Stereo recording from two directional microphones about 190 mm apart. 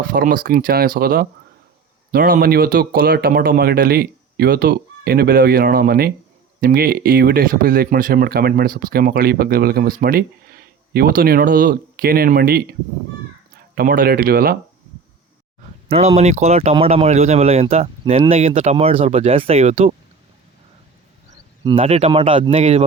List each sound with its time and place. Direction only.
0.1 s speech: 45° right (ahead or behind)
13.7 s speech: 50° right (ahead or behind)
15.9 s speech: 35° right (ahead or behind)
21.6 s speech: 25° right (ahead or behind)